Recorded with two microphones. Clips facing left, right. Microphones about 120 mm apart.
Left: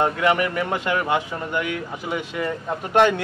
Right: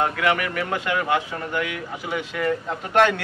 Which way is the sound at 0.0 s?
30° left (ahead or behind).